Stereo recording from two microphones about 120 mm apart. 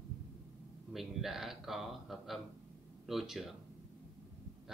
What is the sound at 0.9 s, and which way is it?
Speech, centre (ahead or behind).